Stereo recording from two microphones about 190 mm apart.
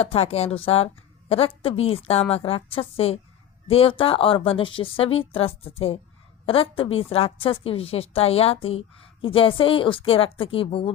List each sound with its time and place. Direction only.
0.0 s a woman's voice: 30° left (ahead or behind)